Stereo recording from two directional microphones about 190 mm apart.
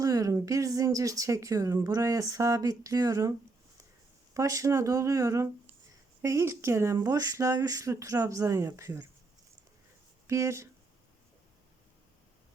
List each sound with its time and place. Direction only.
0.0 s speech: 15° right (ahead or behind)
4.4 s speech: 15° right (ahead or behind)
10.2 s speech: 15° right (ahead or behind)